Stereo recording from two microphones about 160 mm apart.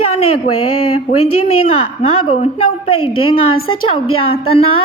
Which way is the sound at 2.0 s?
40° left (ahead or behind).